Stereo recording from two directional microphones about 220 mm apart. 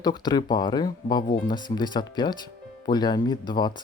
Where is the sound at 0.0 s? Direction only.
20° left (ahead or behind).